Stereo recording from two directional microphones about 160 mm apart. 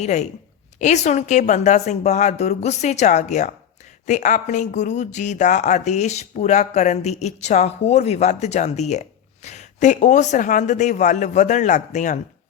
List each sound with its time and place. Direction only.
0.0 s speech: 45° left (ahead or behind)